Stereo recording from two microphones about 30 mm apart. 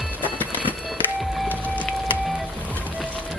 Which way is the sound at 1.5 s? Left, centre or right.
Left.